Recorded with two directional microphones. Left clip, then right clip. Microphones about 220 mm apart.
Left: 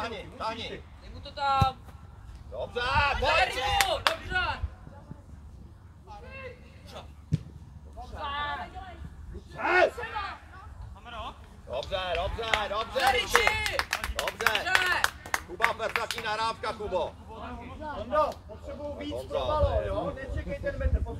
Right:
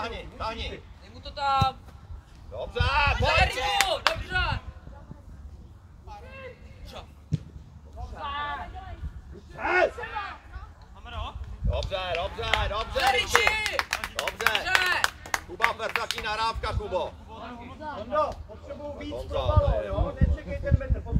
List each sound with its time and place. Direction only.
0.0 s speech: 35° right (ahead or behind)
7.3 s a sound: 15° left (ahead or behind)
8.0 s a sound: 30° left (ahead or behind)
9.6 s speech: 30° left (ahead or behind)
11.1 s a sound: 50° right (ahead or behind)
12.1 s speech: 35° right (ahead or behind)
18.1 s speech: 30° left (ahead or behind)
19.1 s speech: 40° right (ahead or behind)
19.5 s a man's voice: 30° left (ahead or behind)